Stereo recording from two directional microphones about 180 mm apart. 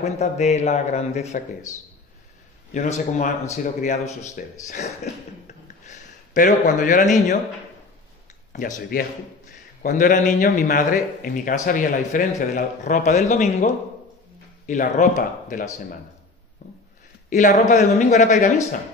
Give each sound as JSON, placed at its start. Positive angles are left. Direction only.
{"t": 0.0, "sound": "a man's voice", "side_deg": 35}
{"t": 2.7, "sound": "a man's voice", "side_deg": 40}
{"t": 8.5, "sound": "a man's voice", "side_deg": 45}
{"t": 16.6, "sound": "a sound", "side_deg": 45}
{"t": 17.3, "sound": "a man's voice", "side_deg": 45}